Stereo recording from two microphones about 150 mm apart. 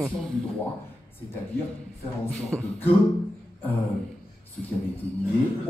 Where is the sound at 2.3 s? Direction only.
5° left (ahead or behind).